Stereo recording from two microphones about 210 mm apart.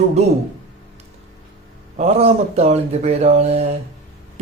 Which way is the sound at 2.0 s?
30° right (ahead or behind).